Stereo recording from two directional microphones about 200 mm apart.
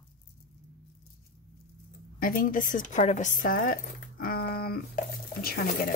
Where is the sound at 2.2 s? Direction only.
45° left (ahead or behind).